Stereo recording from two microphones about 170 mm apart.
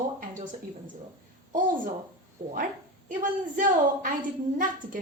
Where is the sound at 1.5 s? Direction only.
50° right (ahead or behind).